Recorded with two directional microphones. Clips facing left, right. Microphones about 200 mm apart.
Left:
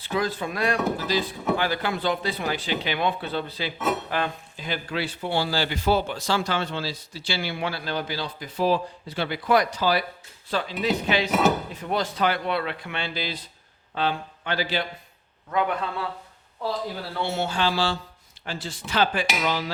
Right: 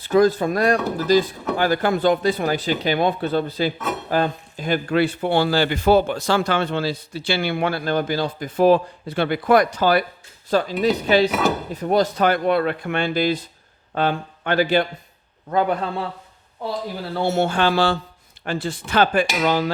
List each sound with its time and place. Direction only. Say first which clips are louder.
0.0 s speech: right 10 dB; 45° right (ahead or behind)
11.3 s speech: even; centre (ahead or behind)
11.7 s speech: right 8 dB; 40° right (ahead or behind)
15.4 s a man's voice: right 5 dB; 35° right (ahead or behind)
17.2 s speech: right 7 dB; 45° right (ahead or behind)